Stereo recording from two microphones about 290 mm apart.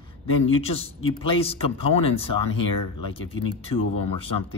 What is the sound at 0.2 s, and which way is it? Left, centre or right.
Speech, centre.